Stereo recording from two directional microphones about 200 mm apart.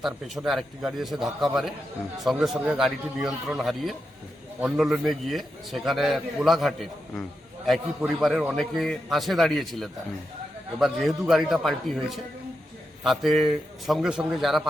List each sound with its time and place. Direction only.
0.0 s a man's voice: centre (ahead or behind)